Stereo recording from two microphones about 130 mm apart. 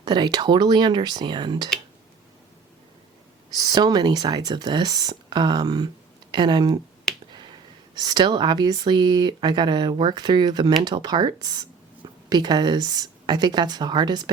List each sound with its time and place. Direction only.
0.0 s speech: 35° right (ahead or behind)
3.5 s speech: 30° right (ahead or behind)
7.3 s finger snapping: 35° right (ahead or behind)
7.9 s speech: 35° right (ahead or behind)